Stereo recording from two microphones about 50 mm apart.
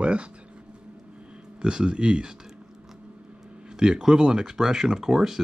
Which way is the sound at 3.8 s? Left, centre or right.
Centre.